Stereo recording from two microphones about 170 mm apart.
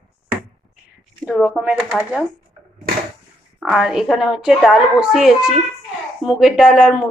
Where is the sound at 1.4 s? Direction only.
5° right (ahead or behind).